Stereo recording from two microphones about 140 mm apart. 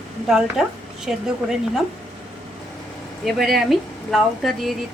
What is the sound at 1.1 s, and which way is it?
Speech, 5° right (ahead or behind).